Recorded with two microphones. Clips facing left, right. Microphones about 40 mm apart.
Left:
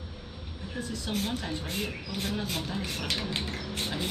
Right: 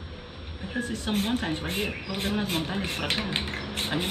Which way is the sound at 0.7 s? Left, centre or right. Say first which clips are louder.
Right 5 dB; right.